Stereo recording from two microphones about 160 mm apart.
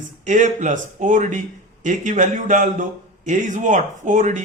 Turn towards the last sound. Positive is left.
turn(degrees=-50)  # may be behind; listen again after turning